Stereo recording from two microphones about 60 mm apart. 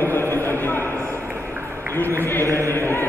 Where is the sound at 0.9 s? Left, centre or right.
Right.